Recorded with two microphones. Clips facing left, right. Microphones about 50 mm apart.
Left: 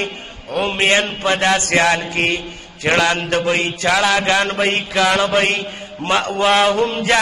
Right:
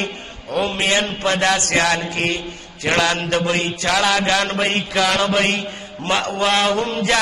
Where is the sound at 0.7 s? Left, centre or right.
Left.